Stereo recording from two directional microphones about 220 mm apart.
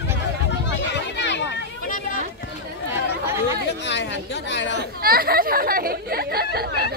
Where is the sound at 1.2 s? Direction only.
50° left (ahead or behind).